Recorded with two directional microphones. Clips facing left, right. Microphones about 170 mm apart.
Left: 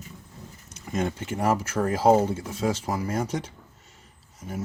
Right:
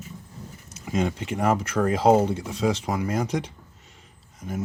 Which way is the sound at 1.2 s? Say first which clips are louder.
Right 1 dB; centre (ahead or behind).